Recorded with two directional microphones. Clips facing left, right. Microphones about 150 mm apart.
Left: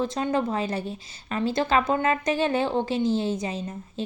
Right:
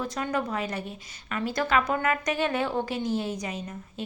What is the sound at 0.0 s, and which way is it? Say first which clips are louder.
A woman's voice: left 4 dB; 25° left (ahead or behind).